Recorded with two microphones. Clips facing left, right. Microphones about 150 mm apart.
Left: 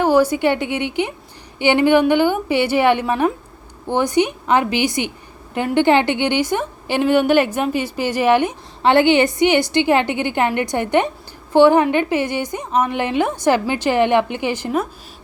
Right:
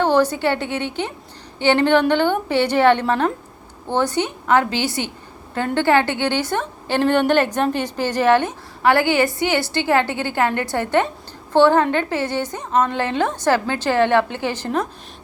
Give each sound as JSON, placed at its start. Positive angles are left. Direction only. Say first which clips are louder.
{"t": 0.0, "sound": "a woman's voice", "louder": "left 2 dB", "side_deg": 10}